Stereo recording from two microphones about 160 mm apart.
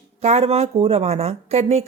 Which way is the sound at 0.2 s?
45° right (ahead or behind).